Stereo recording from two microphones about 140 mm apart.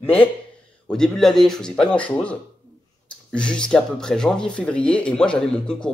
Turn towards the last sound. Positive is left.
turn(degrees=5)  # may be behind; listen again after turning